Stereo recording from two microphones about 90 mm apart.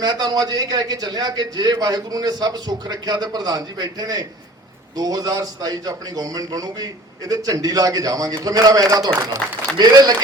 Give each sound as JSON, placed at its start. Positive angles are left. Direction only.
{"t": 0.0, "sound": "a man's voice", "side_deg": -50}